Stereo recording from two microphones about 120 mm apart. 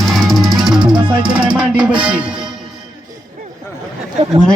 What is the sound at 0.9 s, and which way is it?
Music, 40° right (ahead or behind).